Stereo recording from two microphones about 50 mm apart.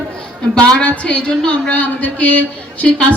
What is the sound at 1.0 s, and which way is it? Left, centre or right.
A woman's voice, centre.